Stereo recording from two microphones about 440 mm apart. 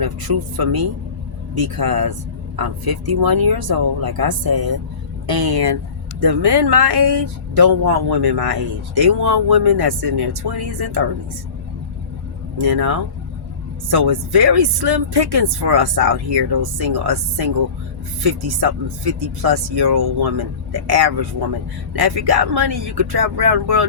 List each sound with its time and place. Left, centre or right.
0.0 s speech: right
12.6 s speech: right
18.6 s speech: right